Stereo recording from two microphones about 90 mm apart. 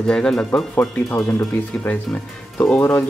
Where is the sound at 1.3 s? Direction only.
20° left (ahead or behind).